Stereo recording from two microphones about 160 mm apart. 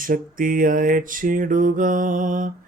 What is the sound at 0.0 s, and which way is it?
Music, 60° right (ahead or behind).